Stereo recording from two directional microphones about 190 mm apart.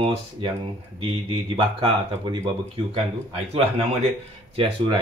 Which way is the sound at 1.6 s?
30° right (ahead or behind).